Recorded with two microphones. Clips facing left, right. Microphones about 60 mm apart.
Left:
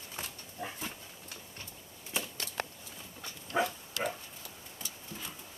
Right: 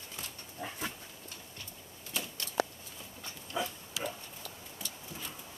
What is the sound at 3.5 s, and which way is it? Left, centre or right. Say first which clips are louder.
Pig: left 5 dB; left.